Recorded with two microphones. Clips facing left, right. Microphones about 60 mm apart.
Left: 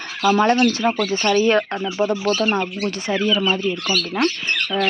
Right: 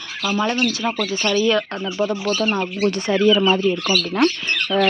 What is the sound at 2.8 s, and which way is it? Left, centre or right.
Speech, centre.